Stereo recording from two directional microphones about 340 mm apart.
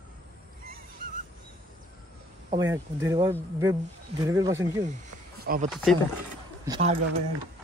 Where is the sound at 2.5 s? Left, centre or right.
Centre.